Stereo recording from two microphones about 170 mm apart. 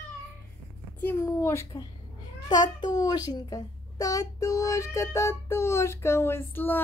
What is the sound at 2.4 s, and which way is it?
A child's voice, 25° left (ahead or behind).